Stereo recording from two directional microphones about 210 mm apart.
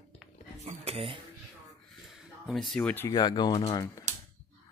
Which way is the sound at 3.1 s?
20° left (ahead or behind).